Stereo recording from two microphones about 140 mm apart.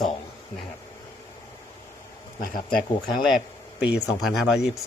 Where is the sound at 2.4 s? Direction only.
90° left.